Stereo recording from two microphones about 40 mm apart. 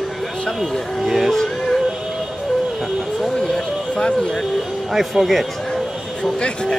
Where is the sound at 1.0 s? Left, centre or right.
Centre.